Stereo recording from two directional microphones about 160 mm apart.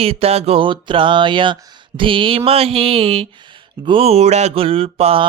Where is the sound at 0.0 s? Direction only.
40° right (ahead or behind).